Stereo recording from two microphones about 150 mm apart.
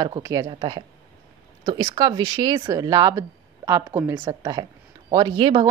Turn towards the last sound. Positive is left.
turn(degrees=-35)  # may be behind; listen again after turning